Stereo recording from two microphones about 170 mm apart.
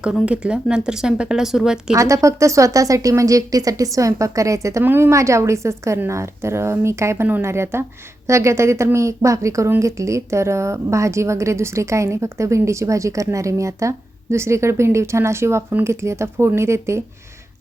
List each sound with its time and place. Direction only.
0.0 s speech: 5° right (ahead or behind)
2.0 s a woman's voice: 20° right (ahead or behind)